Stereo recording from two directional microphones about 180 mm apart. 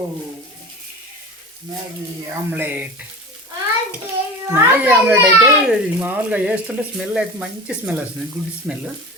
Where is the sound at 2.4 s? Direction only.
10° right (ahead or behind).